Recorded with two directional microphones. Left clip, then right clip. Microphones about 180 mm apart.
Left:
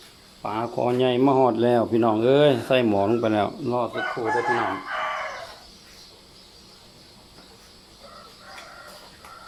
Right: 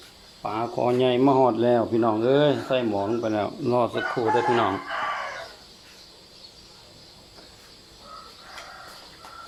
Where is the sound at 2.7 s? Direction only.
35° left (ahead or behind).